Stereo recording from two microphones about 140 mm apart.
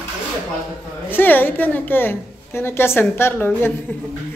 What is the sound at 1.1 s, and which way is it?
A woman's voice, 15° left (ahead or behind).